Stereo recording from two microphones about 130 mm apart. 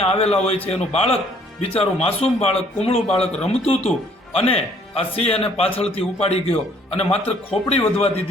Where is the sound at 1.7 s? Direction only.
50° left (ahead or behind).